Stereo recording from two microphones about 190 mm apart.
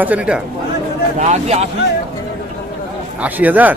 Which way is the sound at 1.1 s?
40° right (ahead or behind).